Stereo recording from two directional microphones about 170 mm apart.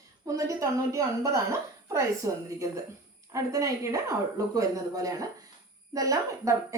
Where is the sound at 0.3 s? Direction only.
20° right (ahead or behind).